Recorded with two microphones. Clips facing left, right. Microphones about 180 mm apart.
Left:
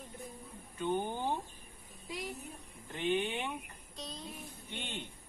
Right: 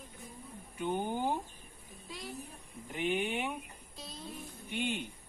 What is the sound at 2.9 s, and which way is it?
Speech, 10° right (ahead or behind).